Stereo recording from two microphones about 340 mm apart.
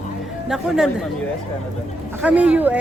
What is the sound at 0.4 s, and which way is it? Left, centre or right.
Speech, centre.